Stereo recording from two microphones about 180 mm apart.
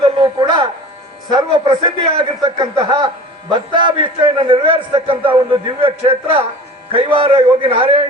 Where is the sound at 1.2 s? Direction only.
25° right (ahead or behind).